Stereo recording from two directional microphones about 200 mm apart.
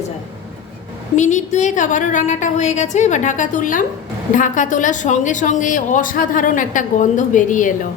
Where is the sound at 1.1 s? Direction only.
35° left (ahead or behind).